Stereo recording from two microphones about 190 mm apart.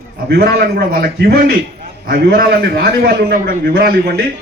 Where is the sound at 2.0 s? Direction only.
55° right (ahead or behind).